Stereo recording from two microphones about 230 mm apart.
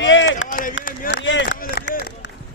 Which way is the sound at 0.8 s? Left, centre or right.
Left.